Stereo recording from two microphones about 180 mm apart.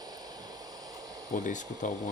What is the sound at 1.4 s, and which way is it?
Speech, 45° left (ahead or behind).